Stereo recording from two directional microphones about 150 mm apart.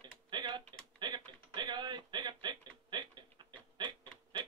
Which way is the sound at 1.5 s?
30° right (ahead or behind).